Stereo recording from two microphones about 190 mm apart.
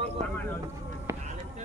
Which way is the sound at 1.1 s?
15° right (ahead or behind).